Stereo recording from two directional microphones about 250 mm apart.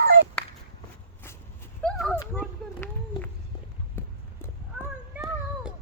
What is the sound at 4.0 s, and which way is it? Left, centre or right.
Clip-clop, centre.